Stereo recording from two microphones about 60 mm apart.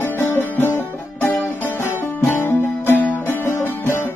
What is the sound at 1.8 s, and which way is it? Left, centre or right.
Music, left.